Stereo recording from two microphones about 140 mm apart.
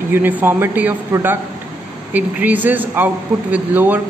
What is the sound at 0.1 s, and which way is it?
Speech, 15° right (ahead or behind).